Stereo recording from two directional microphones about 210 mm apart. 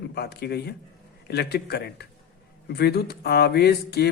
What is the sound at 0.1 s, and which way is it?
Speech, 50° left (ahead or behind).